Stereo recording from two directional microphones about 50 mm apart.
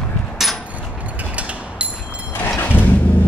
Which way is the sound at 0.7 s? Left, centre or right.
Right.